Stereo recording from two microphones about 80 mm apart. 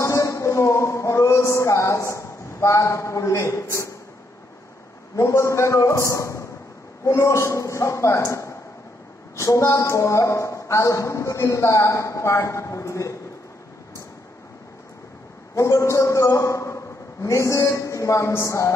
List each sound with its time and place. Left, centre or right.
0.0 s a sound: left
5.1 s speech: left
15.5 s a man's voice: left